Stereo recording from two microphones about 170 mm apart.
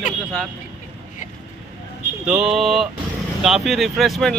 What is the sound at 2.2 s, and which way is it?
Speech, centre (ahead or behind).